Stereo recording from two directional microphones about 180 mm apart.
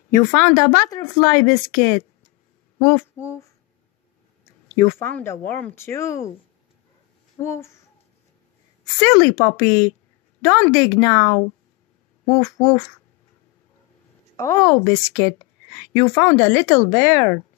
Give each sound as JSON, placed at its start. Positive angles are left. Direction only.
{"t": 0.1, "sound": "speech", "side_deg": 15}
{"t": 2.8, "sound": "a sound", "side_deg": 15}
{"t": 4.5, "sound": "a woman's voice", "side_deg": 15}
{"t": 7.4, "sound": "a woman's voice", "side_deg": 15}
{"t": 9.0, "sound": "a woman's voice", "side_deg": 20}
{"t": 14.3, "sound": "a woman's voice", "side_deg": 15}